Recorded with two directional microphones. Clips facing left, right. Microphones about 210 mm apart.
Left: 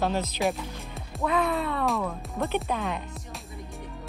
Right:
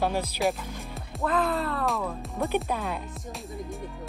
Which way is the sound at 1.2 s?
Centre (ahead or behind).